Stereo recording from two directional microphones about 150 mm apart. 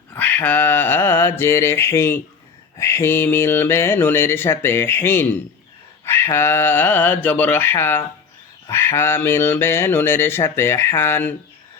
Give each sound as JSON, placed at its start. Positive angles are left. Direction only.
{"t": 0.1, "sound": "mantra", "side_deg": 10}